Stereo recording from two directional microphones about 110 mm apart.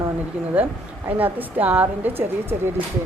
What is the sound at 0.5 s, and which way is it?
Speech, 15° right (ahead or behind).